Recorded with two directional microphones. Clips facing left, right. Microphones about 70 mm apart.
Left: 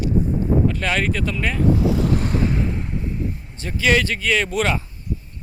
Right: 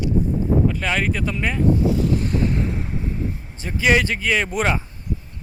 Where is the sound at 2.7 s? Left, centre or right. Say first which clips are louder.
Even; centre.